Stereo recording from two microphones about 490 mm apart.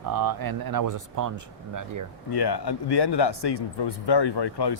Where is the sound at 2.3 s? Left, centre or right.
Left.